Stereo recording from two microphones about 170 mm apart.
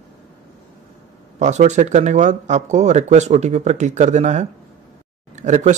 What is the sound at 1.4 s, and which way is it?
Speech, 45° right (ahead or behind).